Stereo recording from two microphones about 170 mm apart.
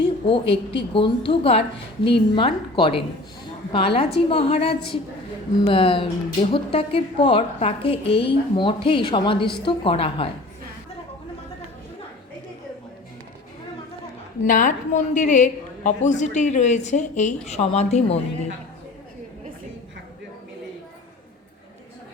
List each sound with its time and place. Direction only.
0.0 s a woman's voice: 30° left (ahead or behind)
14.4 s a woman's voice: 50° left (ahead or behind)